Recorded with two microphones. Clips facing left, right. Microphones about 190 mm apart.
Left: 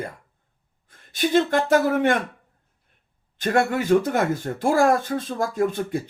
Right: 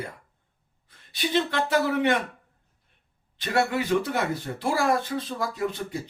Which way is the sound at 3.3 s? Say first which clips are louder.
Left 4 dB; 50° left (ahead or behind).